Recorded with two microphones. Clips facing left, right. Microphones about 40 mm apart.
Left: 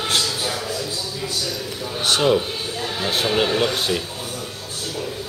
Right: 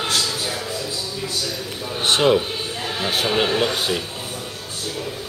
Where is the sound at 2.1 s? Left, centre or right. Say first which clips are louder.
Right 1 dB; right.